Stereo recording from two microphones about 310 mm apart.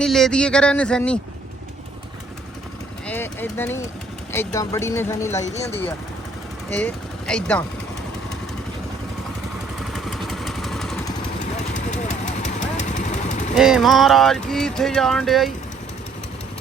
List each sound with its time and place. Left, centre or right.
0.0 s speech: centre
3.1 s speech: centre
6.7 s speech: centre
9.9 s vehicle: centre
11.7 s vehicle: left
13.6 s speech: centre